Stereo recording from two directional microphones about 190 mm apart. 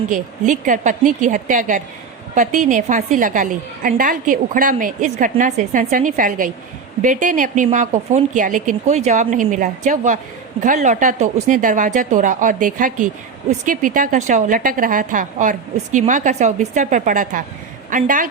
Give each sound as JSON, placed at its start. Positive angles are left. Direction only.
{"t": 0.1, "sound": "a woman's voice", "side_deg": -45}